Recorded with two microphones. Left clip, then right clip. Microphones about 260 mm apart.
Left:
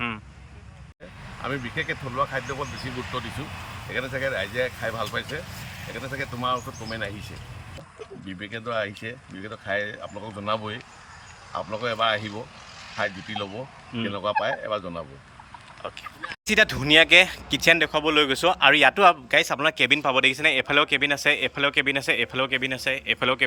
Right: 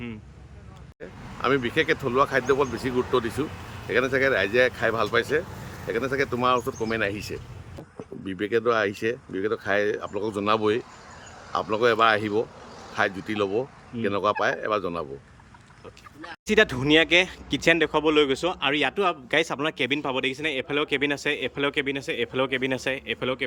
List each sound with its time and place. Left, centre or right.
1.4 s speech: centre
16.5 s speech: centre